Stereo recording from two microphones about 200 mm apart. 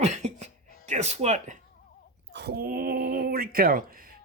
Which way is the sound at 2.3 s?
55° right (ahead or behind).